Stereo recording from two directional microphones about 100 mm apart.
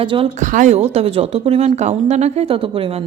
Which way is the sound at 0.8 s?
90° right.